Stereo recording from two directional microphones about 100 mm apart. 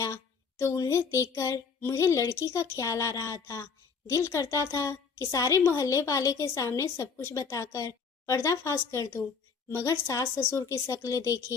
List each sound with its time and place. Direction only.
0.6 s speech: 30° left (ahead or behind)